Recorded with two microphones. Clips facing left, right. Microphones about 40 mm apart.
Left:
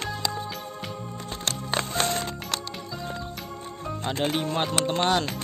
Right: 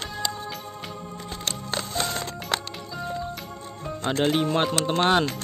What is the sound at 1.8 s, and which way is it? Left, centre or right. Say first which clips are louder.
Music: left 3 dB; left.